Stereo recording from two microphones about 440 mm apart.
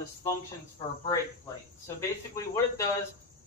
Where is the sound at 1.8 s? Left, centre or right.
Centre.